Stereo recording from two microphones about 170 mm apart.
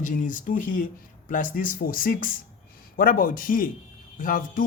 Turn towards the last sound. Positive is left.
turn(degrees=55)  # may be behind; listen again after turning